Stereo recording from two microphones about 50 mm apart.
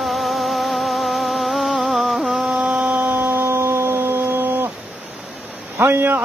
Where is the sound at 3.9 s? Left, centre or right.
Right.